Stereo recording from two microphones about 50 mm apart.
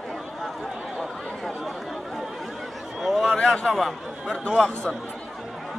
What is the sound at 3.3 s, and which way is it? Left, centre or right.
A man's voice, centre.